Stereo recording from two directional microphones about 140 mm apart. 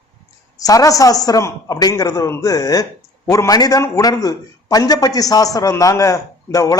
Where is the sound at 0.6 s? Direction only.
25° left (ahead or behind).